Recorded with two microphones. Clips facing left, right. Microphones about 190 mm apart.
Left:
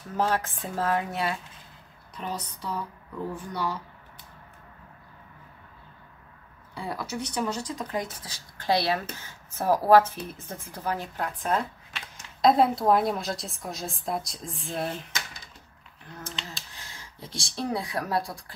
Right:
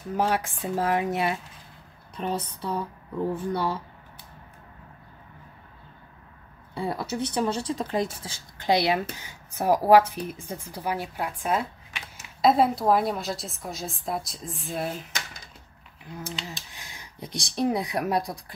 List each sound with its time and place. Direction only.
0.2 s speech: 10° right (ahead or behind); by 3.8 s 30° right (ahead or behind)
6.7 s speech: 25° right (ahead or behind); by 15.0 s centre (ahead or behind)
16.1 s speech: 10° right (ahead or behind)